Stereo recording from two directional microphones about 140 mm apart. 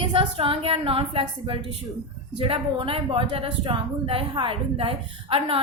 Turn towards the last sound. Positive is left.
turn(degrees=-40)  # may be behind; listen again after turning